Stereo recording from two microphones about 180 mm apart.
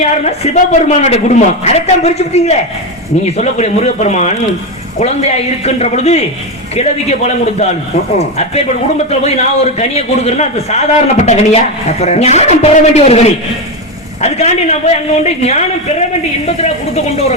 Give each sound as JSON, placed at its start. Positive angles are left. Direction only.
{"t": 0.0, "sound": "a man's voice", "side_deg": 35}